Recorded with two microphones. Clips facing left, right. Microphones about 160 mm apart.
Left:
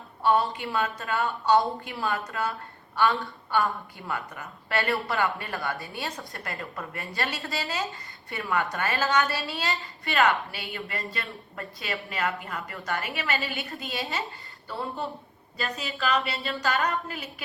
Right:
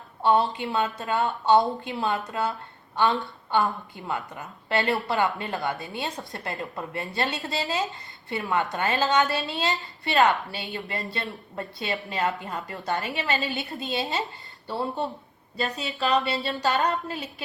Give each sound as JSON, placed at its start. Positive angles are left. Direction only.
{"t": 0.2, "sound": "a woman's voice", "side_deg": -25}
{"t": 16.6, "sound": "a woman's voice", "side_deg": -20}